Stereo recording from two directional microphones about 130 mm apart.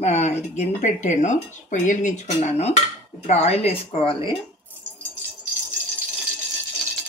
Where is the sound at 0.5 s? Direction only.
70° left (ahead or behind); by 4.3 s 45° left (ahead or behind).